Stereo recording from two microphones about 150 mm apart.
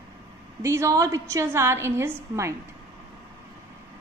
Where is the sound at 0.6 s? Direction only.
20° right (ahead or behind).